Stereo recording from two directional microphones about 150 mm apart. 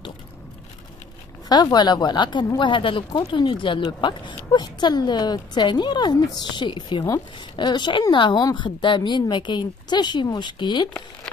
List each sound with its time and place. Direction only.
1.5 s speech: 30° left (ahead or behind)